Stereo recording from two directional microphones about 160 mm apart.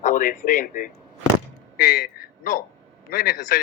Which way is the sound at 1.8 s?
70° left (ahead or behind).